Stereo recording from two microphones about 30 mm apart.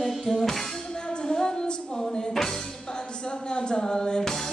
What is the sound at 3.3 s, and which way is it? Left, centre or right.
Music, left.